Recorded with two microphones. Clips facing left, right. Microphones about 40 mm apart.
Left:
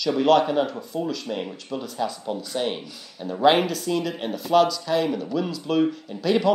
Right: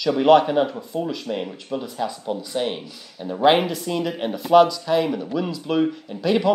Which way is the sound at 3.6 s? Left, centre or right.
Centre.